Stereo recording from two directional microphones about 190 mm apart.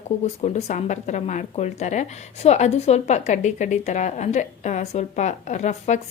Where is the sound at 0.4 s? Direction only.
35° left (ahead or behind).